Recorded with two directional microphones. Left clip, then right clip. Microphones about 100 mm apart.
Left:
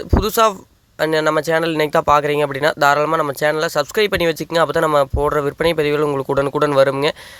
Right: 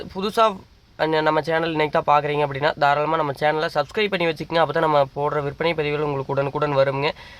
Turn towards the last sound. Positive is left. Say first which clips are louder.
# left 6 dB
turn(degrees=55)  # may be behind; listen again after turning